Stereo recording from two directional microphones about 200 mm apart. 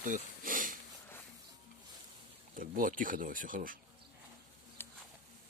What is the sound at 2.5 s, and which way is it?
Speech, 45° right (ahead or behind).